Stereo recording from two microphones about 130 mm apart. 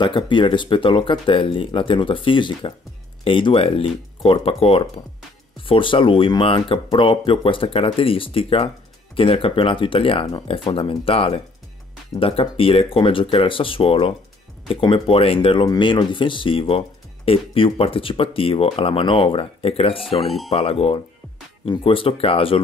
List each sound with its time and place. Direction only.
0.0 s speech: 40° left (ahead or behind)
20.2 s speech: centre (ahead or behind)
20.5 s speech: 50° left (ahead or behind)